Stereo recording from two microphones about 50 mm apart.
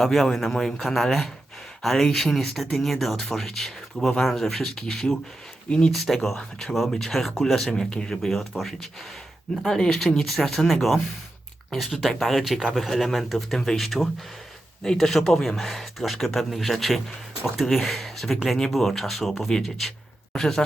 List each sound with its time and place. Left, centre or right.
0.0 s speech: centre
5.6 s speech: left
5.9 s speech: centre
7.7 s speech: centre
12.0 s speech: centre
13.6 s speech: centre
13.8 s speech: centre